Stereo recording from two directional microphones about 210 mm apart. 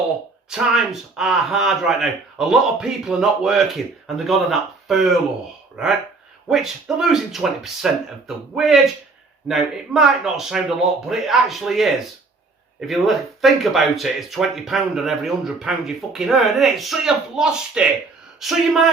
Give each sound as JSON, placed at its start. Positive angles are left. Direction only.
{"t": 0.5, "sound": "speech", "side_deg": 0}
{"t": 6.5, "sound": "speech", "side_deg": 0}